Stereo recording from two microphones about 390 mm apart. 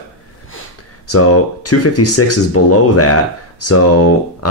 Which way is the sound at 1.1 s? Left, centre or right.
Left.